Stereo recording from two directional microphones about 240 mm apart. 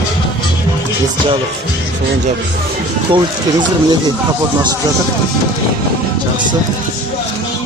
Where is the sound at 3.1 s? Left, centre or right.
Centre.